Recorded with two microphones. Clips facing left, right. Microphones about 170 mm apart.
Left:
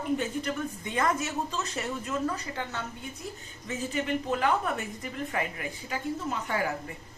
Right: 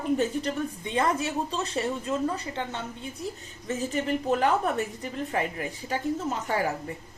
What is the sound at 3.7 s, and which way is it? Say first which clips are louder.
A woman's voice: right 3 dB; 40° right (ahead or behind).